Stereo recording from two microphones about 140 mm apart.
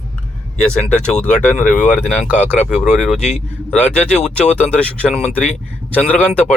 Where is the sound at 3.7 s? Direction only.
10° left (ahead or behind).